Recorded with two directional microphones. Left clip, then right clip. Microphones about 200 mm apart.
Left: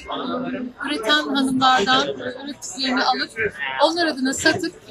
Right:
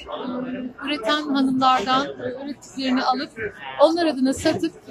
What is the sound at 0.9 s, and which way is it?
A woman's voice, centre (ahead or behind).